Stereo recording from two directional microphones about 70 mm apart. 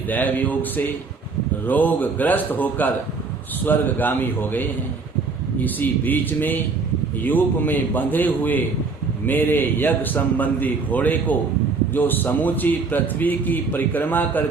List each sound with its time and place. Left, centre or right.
0.1 s speech: left